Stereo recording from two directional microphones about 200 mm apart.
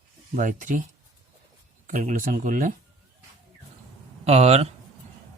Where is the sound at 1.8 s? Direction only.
40° right (ahead or behind).